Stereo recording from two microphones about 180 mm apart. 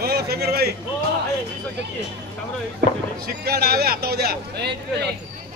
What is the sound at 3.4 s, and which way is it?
A man's voice, 60° right (ahead or behind).